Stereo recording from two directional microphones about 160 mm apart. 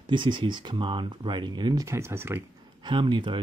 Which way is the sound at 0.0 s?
30° right (ahead or behind).